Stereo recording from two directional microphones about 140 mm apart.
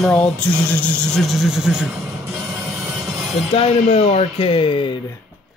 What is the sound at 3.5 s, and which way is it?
Speech, 45° left (ahead or behind).